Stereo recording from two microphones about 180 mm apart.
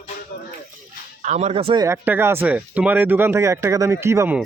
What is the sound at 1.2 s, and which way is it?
Speech, 40° right (ahead or behind).